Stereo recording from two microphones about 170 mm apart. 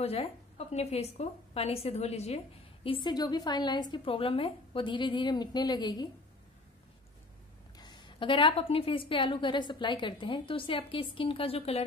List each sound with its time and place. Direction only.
0.0 s a woman's voice: 35° left (ahead or behind)
7.7 s a woman's voice: 25° left (ahead or behind)